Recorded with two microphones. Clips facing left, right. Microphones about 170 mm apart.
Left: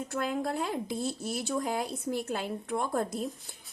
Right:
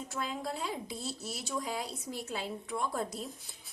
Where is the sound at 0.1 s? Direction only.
55° left (ahead or behind).